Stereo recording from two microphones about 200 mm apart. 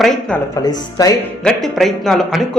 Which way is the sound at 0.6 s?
20° left (ahead or behind).